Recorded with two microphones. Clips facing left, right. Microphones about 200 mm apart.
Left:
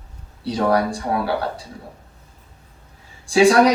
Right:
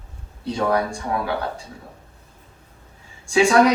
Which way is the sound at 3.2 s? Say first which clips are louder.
Left 2 dB; 35° left (ahead or behind).